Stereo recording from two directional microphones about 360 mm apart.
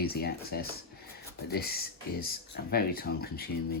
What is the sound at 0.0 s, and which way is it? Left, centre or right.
Speech, left.